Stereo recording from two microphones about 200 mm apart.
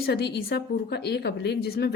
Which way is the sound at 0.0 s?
55° left (ahead or behind).